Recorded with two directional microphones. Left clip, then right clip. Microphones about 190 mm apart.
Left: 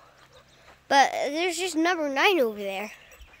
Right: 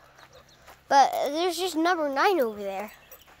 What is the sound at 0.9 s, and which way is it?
Speech, 25° left (ahead or behind).